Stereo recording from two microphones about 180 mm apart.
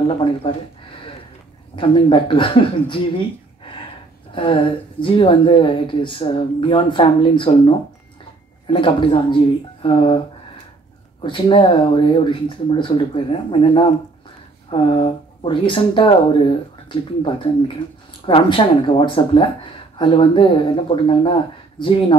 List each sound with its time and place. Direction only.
0.4 s speech: 30° left (ahead or behind)
1.8 s speech: 30° left (ahead or behind)
4.3 s speech: 30° left (ahead or behind)